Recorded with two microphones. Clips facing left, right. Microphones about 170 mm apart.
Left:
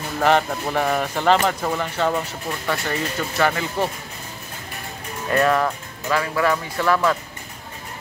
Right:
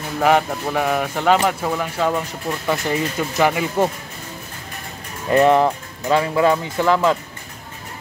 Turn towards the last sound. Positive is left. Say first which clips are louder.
# right 3 dB
turn(degrees=-20)  # may be behind; listen again after turning